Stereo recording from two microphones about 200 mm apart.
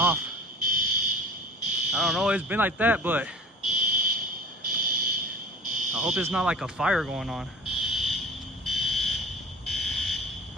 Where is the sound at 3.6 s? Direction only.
45° right (ahead or behind).